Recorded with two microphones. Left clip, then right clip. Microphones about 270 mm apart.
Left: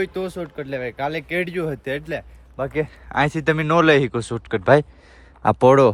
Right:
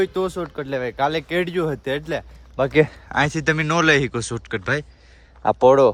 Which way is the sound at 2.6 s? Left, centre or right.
Right.